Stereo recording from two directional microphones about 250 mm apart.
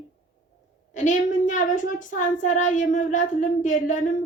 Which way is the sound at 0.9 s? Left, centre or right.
Left.